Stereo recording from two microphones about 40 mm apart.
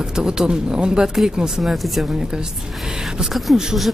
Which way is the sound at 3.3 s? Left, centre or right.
Centre.